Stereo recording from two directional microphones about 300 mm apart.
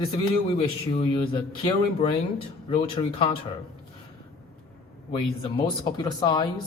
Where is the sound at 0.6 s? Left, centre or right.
Centre.